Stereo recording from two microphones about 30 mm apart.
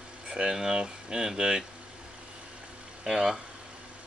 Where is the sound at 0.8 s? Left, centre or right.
Right.